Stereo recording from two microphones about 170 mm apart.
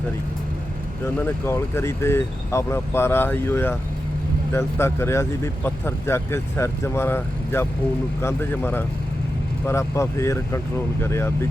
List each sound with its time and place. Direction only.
1.0 s speech: 15° left (ahead or behind)